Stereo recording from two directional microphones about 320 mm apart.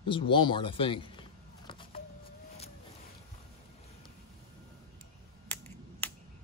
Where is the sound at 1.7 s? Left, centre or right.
Centre.